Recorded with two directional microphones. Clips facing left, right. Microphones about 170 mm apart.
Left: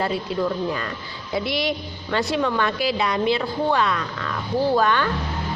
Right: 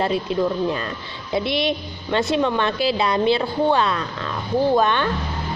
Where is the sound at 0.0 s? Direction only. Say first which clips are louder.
Right 3 dB; 20° right (ahead or behind).